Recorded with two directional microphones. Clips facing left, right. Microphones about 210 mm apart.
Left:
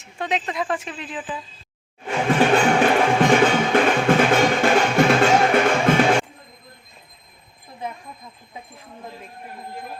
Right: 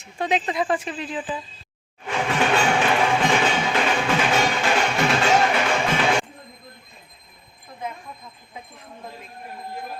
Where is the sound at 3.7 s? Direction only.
50° left (ahead or behind).